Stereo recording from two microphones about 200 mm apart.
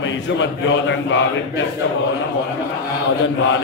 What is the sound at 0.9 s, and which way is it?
Speech, 70° left (ahead or behind).